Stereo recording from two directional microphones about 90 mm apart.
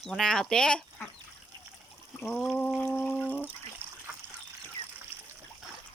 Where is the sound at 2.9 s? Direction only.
5° left (ahead or behind).